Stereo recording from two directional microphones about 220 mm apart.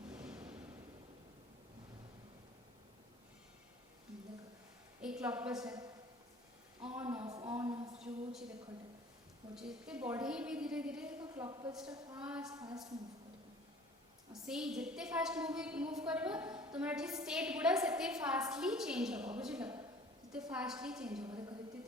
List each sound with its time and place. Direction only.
0.1 s a sound: 5° right (ahead or behind)
4.9 s a woman's voice: 5° right (ahead or behind)
5.6 s a man's voice: 15° right (ahead or behind)
6.8 s a sound: 5° right (ahead or behind)
7.2 s a sound: 20° right (ahead or behind)
7.9 s a woman's voice: centre (ahead or behind)
9.6 s a woman's voice: 5° right (ahead or behind)
11.4 s a woman's voice: 20° right (ahead or behind)
12.2 s a woman's voice: 5° right (ahead or behind)
12.5 s a woman's voice: 15° right (ahead or behind)
14.4 s a woman's voice: 5° right (ahead or behind)
21.2 s a sound: 20° right (ahead or behind)